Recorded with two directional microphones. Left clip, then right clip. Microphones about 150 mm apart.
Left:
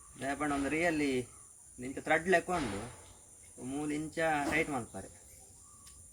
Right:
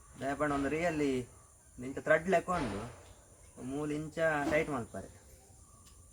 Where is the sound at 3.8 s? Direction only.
30° right (ahead or behind).